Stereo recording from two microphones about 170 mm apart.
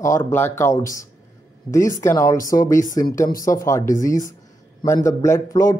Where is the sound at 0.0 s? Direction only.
15° left (ahead or behind).